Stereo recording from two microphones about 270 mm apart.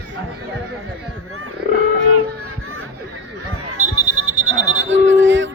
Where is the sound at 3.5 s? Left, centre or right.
Right.